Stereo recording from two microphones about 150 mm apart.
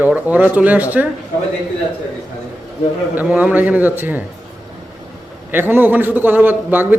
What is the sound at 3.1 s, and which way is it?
A man's voice, 10° right (ahead or behind).